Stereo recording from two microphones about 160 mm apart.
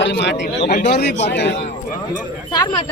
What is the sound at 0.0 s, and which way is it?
Speech, 90° left.